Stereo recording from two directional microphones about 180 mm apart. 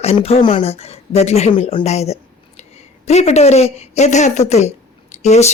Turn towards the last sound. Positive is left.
turn(degrees=40)  # may be behind; listen again after turning